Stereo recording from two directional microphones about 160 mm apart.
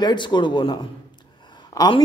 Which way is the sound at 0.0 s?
30° left (ahead or behind).